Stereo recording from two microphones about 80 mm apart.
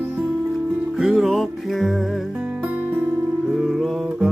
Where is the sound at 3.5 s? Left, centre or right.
Centre.